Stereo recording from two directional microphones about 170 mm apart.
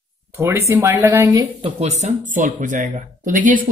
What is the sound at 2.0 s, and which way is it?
Speech, 50° right (ahead or behind).